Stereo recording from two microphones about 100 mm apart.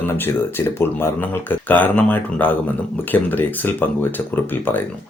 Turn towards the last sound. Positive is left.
turn(degrees=20)  # may be behind; listen again after turning